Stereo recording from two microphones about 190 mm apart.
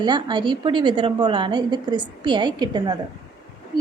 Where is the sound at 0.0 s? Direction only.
25° right (ahead or behind).